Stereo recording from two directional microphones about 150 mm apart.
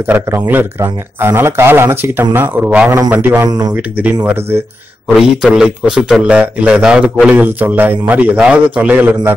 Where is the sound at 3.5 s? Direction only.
25° right (ahead or behind).